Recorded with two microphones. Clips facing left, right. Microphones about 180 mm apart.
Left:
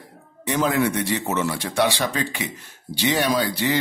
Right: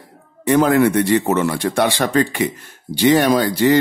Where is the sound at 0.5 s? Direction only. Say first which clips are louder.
Right 8 dB; 55° right (ahead or behind).